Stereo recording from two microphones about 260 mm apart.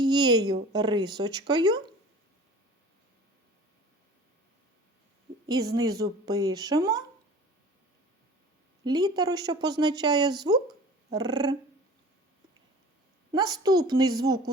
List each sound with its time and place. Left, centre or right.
0.0 s speech: centre
5.7 s speech: centre
8.8 s speech: centre
13.3 s speech: centre